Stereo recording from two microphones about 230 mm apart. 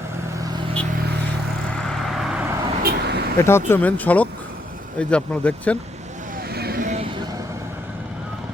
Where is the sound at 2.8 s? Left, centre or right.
Right.